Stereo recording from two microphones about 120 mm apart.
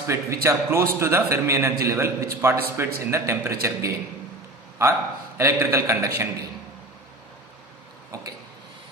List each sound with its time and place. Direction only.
0.1 s a man's voice: 25° right (ahead or behind)
5.4 s a man's voice: 20° right (ahead or behind)
8.1 s a sound: 25° right (ahead or behind)